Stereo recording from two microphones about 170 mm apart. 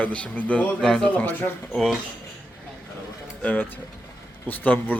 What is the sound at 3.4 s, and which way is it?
Speech, 10° left (ahead or behind).